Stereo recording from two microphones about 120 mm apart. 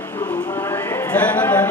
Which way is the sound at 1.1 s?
10° left (ahead or behind).